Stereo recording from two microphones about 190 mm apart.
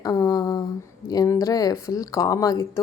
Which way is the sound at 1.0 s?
20° left (ahead or behind).